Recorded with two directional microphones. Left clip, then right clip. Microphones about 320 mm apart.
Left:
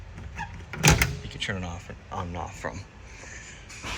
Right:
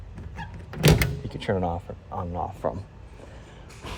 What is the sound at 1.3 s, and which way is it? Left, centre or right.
Speech, centre.